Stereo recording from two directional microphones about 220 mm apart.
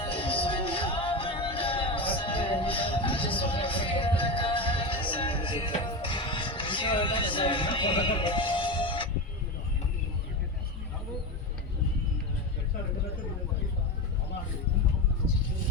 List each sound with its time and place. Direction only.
0.0 s music: 25° left (ahead or behind)